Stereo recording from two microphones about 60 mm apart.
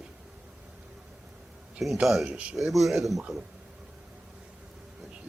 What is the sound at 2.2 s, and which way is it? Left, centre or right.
Speech, right.